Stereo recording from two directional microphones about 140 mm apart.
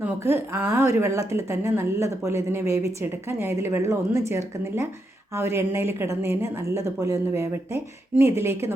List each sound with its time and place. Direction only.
0.0 s speech: 15° right (ahead or behind)